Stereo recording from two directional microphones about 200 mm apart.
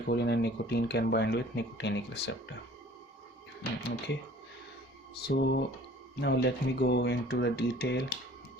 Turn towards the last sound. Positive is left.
turn(degrees=55)  # may be behind; listen again after turning